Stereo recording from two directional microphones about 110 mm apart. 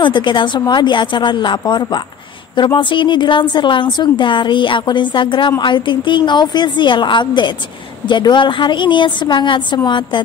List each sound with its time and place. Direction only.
0.0 s a woman's voice: 45° left (ahead or behind)